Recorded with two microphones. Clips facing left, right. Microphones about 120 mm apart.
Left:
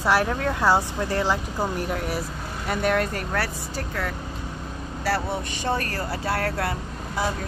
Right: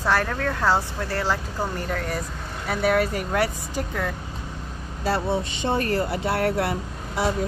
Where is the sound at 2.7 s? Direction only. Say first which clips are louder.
Right 2 dB; 5° right (ahead or behind).